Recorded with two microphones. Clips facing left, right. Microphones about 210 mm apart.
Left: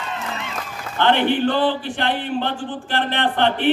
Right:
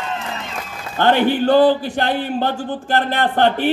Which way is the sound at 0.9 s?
40° right (ahead or behind).